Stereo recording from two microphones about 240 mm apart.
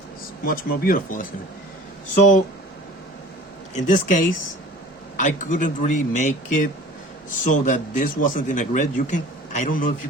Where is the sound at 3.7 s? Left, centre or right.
Left.